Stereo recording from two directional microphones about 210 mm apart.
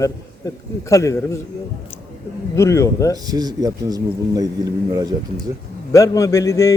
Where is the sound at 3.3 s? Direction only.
20° right (ahead or behind).